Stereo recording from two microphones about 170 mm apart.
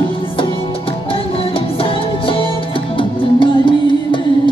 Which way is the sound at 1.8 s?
30° left (ahead or behind).